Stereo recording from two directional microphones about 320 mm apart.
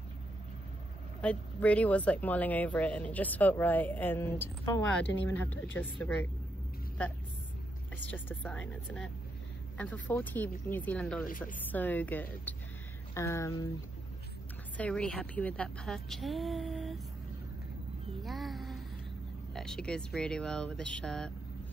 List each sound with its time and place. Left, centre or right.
1.2 s speech: centre
7.9 s speech: centre
11.2 s speech: left
11.5 s speech: centre
14.8 s speech: centre
18.2 s speech: centre